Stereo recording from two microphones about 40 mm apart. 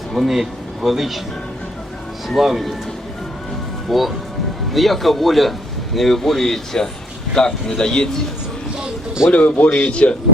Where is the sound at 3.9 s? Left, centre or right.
Centre.